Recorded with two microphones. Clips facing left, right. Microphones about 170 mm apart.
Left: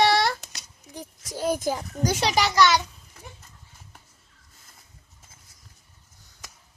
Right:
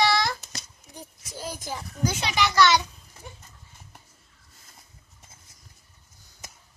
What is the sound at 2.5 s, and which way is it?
Speech, 5° left (ahead or behind).